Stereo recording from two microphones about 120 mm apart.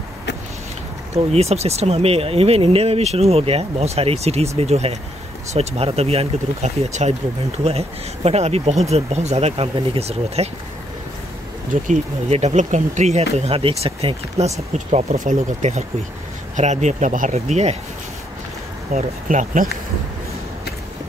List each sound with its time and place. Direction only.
1.1 s speech: 60° right (ahead or behind)
7.6 s speech: 60° right (ahead or behind)
11.7 s speech: 75° right (ahead or behind); by 14.5 s 55° right (ahead or behind)
14.9 s speech: 65° right (ahead or behind)
18.9 s speech: 90° right